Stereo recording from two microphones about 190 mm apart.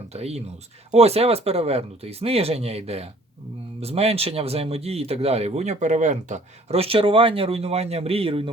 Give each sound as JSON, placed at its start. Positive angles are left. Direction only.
{"t": 0.1, "sound": "speech", "side_deg": -35}